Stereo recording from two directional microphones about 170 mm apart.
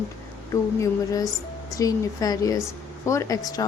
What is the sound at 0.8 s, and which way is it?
A woman's voice, 20° left (ahead or behind).